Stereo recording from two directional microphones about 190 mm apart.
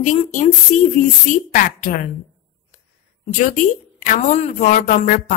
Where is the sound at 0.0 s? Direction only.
40° left (ahead or behind).